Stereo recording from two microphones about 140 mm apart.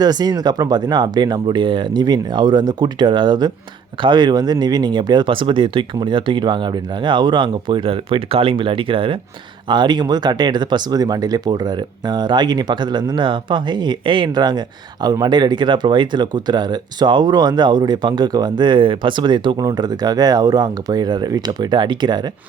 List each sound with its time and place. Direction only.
0.0 s speech: 30° right (ahead or behind)